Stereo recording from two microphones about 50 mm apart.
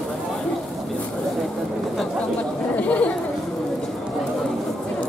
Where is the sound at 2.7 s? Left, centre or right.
Left.